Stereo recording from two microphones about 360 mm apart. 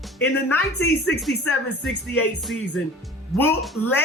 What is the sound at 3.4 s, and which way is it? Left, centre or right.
Speech, centre.